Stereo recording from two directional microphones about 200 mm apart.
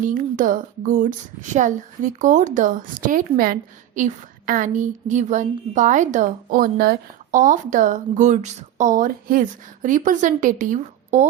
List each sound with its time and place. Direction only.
0.0 s speech: 40° right (ahead or behind)